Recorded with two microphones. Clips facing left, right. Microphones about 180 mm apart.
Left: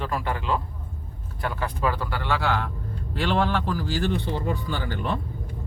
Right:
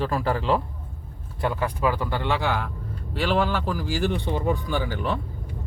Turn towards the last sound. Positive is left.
turn(degrees=-5)  # may be behind; listen again after turning